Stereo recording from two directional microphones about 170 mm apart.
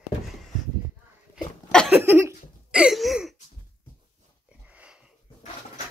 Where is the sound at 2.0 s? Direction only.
15° right (ahead or behind).